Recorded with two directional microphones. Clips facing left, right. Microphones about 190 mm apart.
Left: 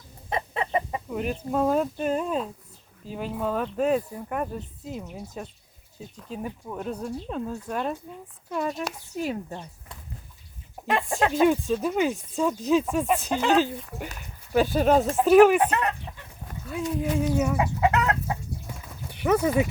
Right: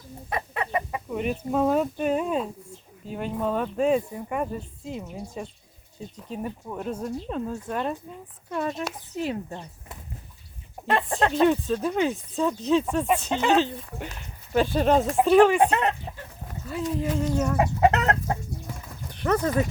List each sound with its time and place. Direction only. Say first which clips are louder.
0.3 s chicken: left 1 dB; 25° left (ahead or behind)
1.1 s speech: right 1 dB; centre (ahead or behind)
10.8 s speech: right 1 dB; centre (ahead or behind)
15.5 s speech: right 2 dB; 25° right (ahead or behind)
16.6 s speech: even; centre (ahead or behind)
17.7 s chicken: right 4 dB; 50° right (ahead or behind)
19.0 s clip-clop: left 2 dB; 10° left (ahead or behind)